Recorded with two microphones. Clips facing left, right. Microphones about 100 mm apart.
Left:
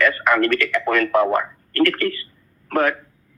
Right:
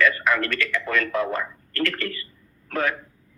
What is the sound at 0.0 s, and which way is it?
A man's voice, 55° left (ahead or behind).